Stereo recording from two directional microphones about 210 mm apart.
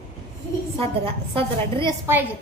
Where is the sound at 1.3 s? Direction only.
20° right (ahead or behind).